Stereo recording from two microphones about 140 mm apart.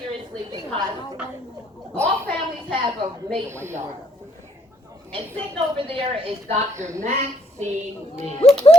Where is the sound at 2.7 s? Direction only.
35° right (ahead or behind).